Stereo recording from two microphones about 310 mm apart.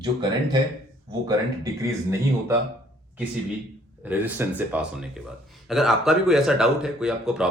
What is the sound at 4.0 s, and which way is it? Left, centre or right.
Speech, centre.